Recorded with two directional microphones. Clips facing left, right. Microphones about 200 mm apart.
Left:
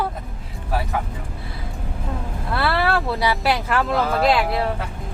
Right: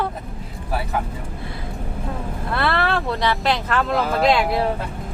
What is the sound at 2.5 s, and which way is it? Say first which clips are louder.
Speech: left 1 dB; 5° left (ahead or behind).